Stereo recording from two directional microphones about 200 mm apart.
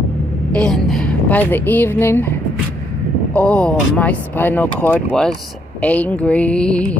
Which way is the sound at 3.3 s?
5° left (ahead or behind).